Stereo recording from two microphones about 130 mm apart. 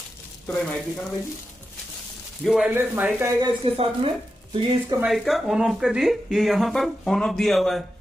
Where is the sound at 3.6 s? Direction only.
45° right (ahead or behind).